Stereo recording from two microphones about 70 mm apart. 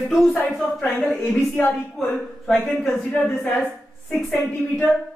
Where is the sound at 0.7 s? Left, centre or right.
Centre.